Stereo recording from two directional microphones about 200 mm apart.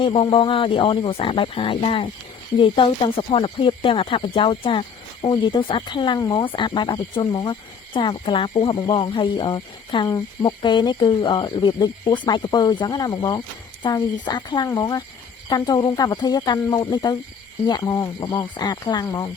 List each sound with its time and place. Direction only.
0.0 s speech: 25° left (ahead or behind)